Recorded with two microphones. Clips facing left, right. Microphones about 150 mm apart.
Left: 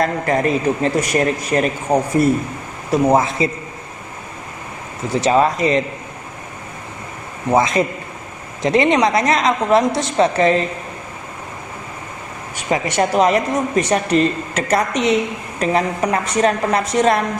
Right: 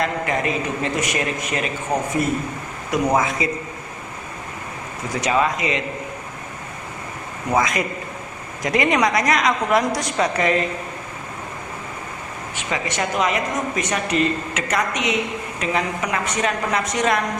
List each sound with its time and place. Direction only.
0.0 s a woman's voice: 35° left (ahead or behind)
5.0 s a woman's voice: 30° left (ahead or behind)
7.5 s a woman's voice: 25° left (ahead or behind)
12.5 s a woman's voice: 35° left (ahead or behind)